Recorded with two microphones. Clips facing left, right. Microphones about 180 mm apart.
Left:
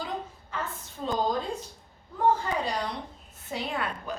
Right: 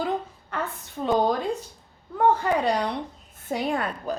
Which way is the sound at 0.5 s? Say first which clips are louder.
Right 5 dB; 60° right (ahead or behind).